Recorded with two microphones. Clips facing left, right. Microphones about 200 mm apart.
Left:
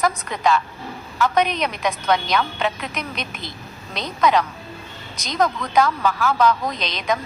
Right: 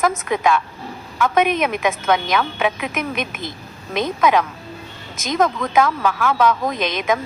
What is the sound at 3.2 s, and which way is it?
Speech, 50° right (ahead or behind).